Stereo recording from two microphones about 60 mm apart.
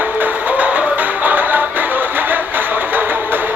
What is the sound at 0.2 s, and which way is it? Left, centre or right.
Music, right.